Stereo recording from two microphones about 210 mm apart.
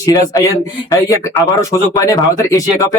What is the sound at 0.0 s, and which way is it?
Music, 15° left (ahead or behind).